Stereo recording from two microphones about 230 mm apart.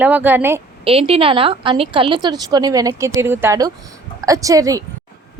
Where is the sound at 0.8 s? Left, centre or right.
Right.